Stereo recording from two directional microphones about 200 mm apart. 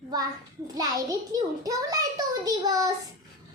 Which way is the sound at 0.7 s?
20° right (ahead or behind).